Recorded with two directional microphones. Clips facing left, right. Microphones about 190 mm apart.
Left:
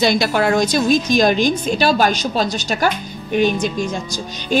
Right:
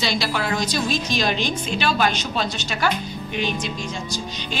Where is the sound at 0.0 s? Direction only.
50° left (ahead or behind).